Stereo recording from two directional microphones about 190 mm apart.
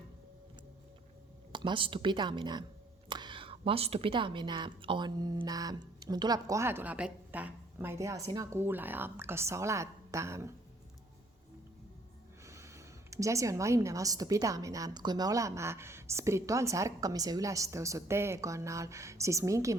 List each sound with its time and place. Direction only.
1.5 s a woman's voice: 25° right (ahead or behind)
12.5 s a woman's voice: 15° right (ahead or behind)